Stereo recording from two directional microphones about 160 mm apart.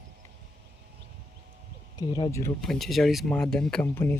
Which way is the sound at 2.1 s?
20° left (ahead or behind).